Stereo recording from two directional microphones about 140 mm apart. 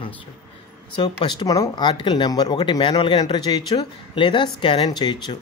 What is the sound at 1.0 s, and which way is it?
Speech, 35° left (ahead or behind).